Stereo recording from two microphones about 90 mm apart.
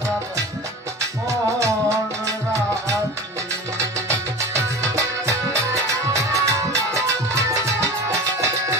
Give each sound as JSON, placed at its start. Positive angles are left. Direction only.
{"t": 4.9, "sound": "music", "side_deg": -35}